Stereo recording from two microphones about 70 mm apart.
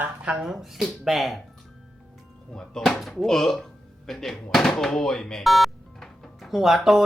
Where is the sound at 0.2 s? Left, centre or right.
Centre.